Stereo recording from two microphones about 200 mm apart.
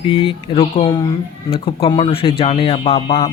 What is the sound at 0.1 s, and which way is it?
Speech, 25° left (ahead or behind).